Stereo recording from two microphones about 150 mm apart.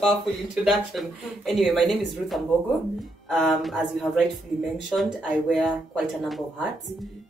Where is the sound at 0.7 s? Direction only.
Centre (ahead or behind).